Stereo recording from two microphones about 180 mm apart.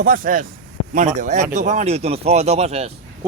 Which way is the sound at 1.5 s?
40° right (ahead or behind).